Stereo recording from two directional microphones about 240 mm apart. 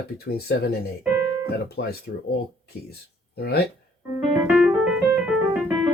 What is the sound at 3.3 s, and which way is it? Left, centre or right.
Speech, left.